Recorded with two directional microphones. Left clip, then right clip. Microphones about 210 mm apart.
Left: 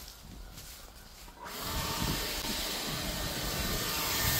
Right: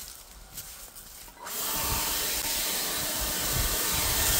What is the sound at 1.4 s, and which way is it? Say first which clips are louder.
Tools: right 4 dB; 50° right (ahead or behind).